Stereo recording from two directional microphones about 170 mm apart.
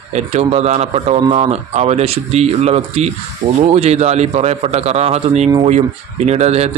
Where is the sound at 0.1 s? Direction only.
40° right (ahead or behind).